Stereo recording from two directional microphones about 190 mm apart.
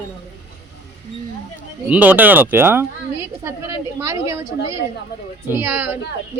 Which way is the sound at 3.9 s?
15° right (ahead or behind).